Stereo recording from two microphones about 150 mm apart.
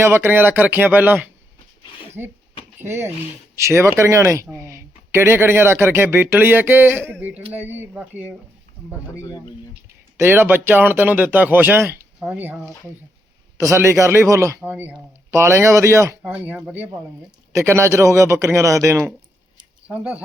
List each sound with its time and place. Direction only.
0.0 s speech: 15° right (ahead or behind)
9.2 s speech: 25° left (ahead or behind)
10.2 s speech: 15° right (ahead or behind)
19.9 s speech: 10° right (ahead or behind)